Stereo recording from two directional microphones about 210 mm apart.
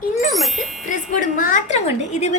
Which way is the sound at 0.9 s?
40° left (ahead or behind).